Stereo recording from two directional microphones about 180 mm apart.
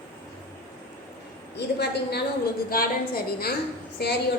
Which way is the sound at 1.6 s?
65° left (ahead or behind).